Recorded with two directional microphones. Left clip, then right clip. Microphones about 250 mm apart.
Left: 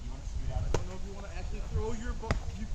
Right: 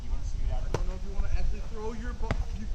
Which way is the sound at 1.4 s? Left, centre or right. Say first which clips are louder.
Even; centre.